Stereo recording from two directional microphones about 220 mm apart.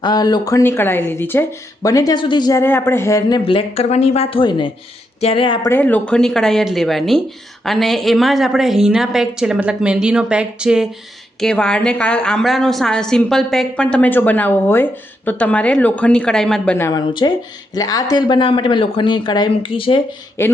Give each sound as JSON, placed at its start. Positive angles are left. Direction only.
{"t": 0.0, "sound": "speech", "side_deg": 20}
{"t": 5.7, "sound": "a woman's voice", "side_deg": 5}
{"t": 20.4, "sound": "speech", "side_deg": 10}